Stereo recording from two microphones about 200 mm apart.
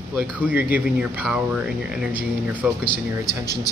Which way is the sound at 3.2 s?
20° left (ahead or behind).